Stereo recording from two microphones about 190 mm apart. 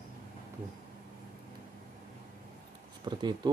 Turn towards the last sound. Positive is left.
turn(degrees=-20)  # may be behind; listen again after turning